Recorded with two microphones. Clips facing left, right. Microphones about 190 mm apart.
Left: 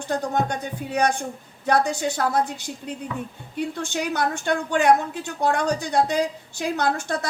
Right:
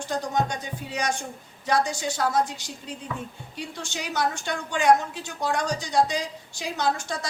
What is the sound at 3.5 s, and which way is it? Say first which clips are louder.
A woman's voice: left 9 dB; 55° left (ahead or behind).